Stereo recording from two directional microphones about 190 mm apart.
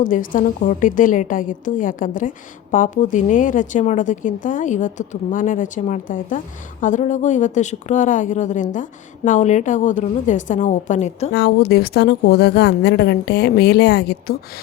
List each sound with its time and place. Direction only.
0.0 s a woman's voice: 45° left (ahead or behind)
11.3 s a woman's voice: 60° left (ahead or behind)